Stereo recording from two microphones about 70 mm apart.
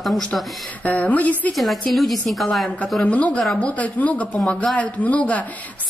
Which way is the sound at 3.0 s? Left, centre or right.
Centre.